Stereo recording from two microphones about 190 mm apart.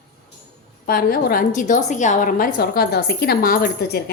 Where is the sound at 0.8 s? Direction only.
50° left (ahead or behind).